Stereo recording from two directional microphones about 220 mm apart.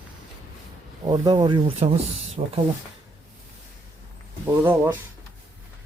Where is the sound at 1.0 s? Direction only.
20° right (ahead or behind).